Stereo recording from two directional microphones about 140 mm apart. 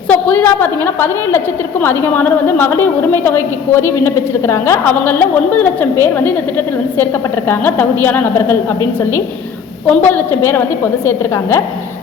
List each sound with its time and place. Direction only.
0.1 s a woman's voice: 10° left (ahead or behind)
9.8 s a woman's voice: 10° left (ahead or behind)